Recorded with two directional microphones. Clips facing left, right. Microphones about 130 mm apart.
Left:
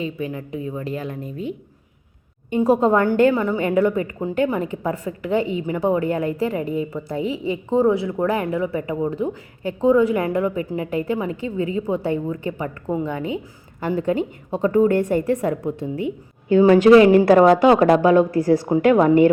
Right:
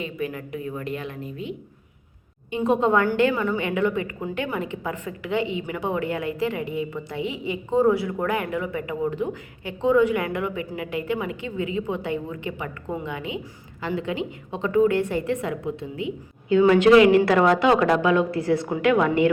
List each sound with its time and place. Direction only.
0.0 s a woman's voice: 30° left (ahead or behind)
3.3 s a woman's voice: 30° left (ahead or behind)